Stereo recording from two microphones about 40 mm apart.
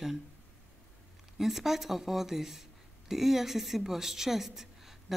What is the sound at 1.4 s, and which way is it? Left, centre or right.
A woman's voice, centre.